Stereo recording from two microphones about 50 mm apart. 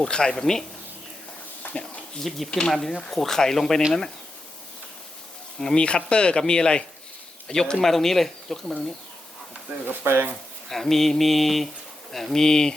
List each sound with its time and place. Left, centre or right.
0.0 s speech: centre
1.6 s a sound: left
2.5 s speech: centre
5.5 s speech: centre
9.8 s speech: right
10.7 s mantra: centre
12.1 s speech: centre